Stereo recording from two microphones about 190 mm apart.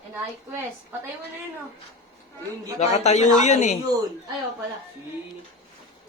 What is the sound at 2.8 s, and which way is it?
Speech, 35° left (ahead or behind).